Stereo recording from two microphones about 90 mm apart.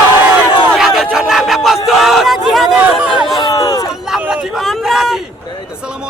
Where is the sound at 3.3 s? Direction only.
45° left (ahead or behind).